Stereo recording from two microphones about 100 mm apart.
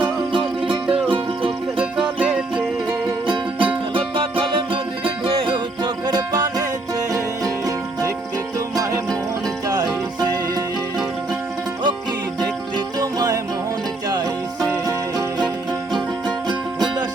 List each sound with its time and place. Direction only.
0.6 s music: 10° right (ahead or behind)
1.1 s music: 60° right (ahead or behind)
1.8 s music: 10° right (ahead or behind)
3.2 s music: 55° right (ahead or behind)
12.4 s music: 40° right (ahead or behind)
14.7 s music: 35° right (ahead or behind)
16.5 s music: 45° right (ahead or behind)